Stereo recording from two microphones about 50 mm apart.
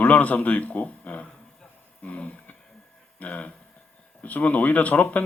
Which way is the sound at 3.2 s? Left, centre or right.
Left.